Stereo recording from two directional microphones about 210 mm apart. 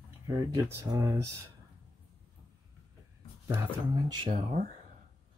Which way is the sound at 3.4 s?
15° right (ahead or behind).